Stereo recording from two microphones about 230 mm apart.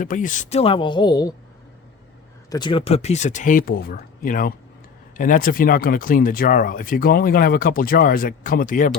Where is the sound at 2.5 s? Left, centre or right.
Centre.